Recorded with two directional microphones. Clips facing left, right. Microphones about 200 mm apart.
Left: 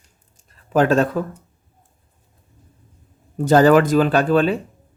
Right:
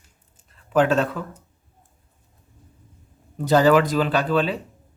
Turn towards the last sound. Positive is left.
turn(degrees=50)  # may be behind; listen again after turning